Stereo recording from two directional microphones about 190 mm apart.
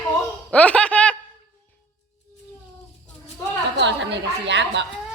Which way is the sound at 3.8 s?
65° right (ahead or behind).